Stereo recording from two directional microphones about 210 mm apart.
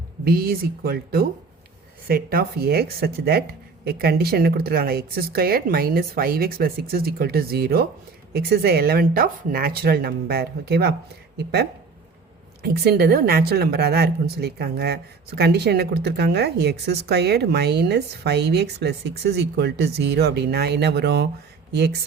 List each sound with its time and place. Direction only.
0.3 s speech: 45° right (ahead or behind)